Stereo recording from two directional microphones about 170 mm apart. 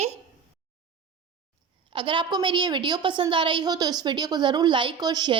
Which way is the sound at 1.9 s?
30° right (ahead or behind).